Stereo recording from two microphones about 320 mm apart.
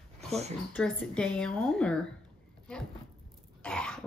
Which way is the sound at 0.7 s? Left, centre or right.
Centre.